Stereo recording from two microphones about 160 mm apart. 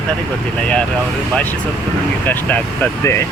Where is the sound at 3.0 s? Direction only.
15° left (ahead or behind).